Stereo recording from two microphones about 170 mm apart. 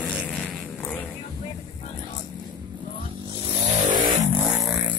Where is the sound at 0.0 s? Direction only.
5° left (ahead or behind).